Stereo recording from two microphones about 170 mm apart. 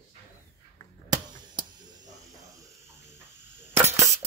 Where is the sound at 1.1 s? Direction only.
25° right (ahead or behind).